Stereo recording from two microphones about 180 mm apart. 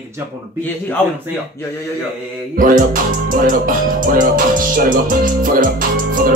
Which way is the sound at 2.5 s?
50° right (ahead or behind).